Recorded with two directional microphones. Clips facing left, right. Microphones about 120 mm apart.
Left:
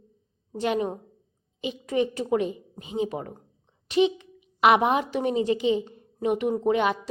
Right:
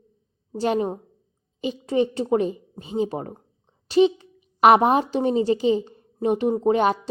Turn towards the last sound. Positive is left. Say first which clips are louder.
# right 3 dB
turn(degrees=-35)  # may be behind; listen again after turning